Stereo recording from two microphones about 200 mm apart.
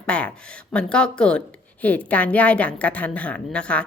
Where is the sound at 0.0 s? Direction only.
5° left (ahead or behind).